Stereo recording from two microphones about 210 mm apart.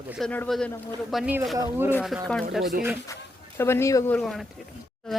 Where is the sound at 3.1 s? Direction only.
15° left (ahead or behind).